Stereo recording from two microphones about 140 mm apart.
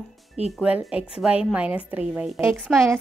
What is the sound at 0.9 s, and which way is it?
A woman's voice, 5° right (ahead or behind).